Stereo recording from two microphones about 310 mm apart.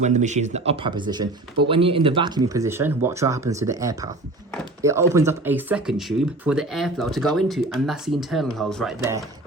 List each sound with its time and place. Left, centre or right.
0.0 s speech: right; by 9.2 s centre